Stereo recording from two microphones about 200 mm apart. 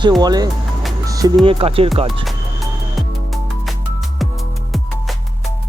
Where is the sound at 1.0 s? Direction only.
15° right (ahead or behind).